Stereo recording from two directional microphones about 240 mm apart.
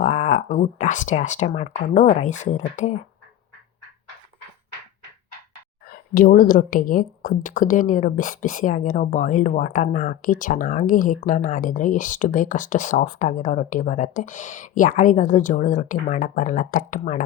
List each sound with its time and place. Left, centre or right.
0.0 s a woman's voice: left
5.9 s a woman's voice: left